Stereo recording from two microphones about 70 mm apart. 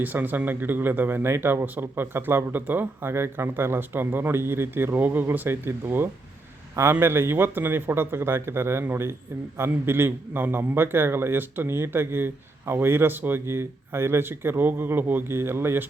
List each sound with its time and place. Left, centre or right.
0.0 s a man's voice: right